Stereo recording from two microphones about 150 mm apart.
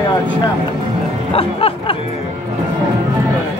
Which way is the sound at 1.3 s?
40° left (ahead or behind).